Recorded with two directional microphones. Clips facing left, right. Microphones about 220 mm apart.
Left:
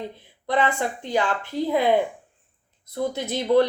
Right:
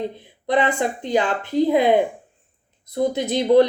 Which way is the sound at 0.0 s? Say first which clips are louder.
Right 6 dB; 15° right (ahead or behind).